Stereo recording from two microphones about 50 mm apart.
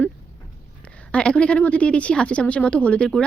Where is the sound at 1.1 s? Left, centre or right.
Left.